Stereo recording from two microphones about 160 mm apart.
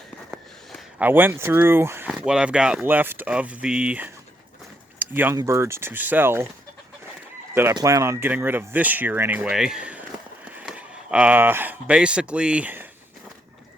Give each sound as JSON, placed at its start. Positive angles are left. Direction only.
{"t": 0.3, "sound": "a sound", "side_deg": -5}
{"t": 1.0, "sound": "speech", "side_deg": -15}
{"t": 2.0, "sound": "speech", "side_deg": -5}
{"t": 4.9, "sound": "a sound", "side_deg": -10}
{"t": 5.4, "sound": "speech", "side_deg": -15}
{"t": 7.7, "sound": "speech", "side_deg": -25}